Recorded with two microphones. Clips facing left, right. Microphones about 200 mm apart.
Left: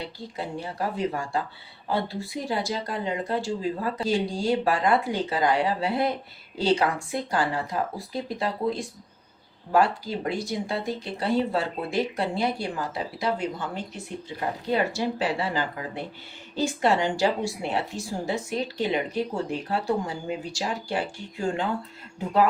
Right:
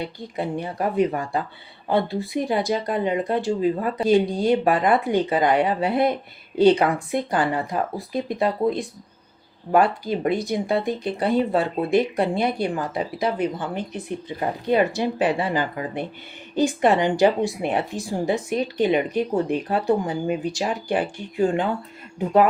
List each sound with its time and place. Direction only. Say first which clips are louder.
0.2 s speech: right 6 dB; 20° right (ahead or behind)
2.5 s a woman's voice: right 5 dB; 20° right (ahead or behind)
10.1 s a woman's voice: right 6 dB; 20° right (ahead or behind)